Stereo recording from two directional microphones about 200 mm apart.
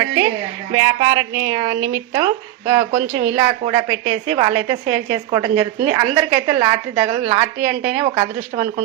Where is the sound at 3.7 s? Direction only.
25° right (ahead or behind).